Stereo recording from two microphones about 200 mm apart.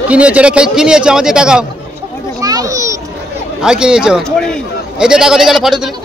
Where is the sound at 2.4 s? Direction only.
15° right (ahead or behind).